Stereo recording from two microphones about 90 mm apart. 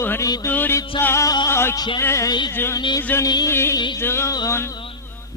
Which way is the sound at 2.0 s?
30° left (ahead or behind).